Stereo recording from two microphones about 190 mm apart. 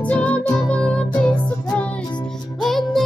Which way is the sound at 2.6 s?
Centre (ahead or behind).